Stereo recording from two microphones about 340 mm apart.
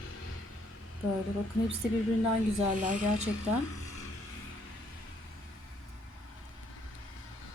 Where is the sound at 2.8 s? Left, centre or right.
Right.